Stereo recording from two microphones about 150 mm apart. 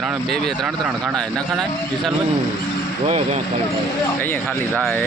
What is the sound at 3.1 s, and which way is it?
Speech, 50° right (ahead or behind).